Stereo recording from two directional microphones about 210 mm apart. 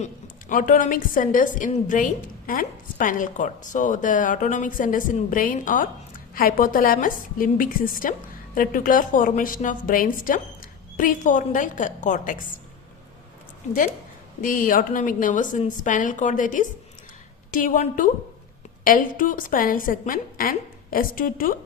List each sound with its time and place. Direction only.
0.0 s a woman's voice: 40° left (ahead or behind)
14.4 s a woman's voice: 40° left (ahead or behind)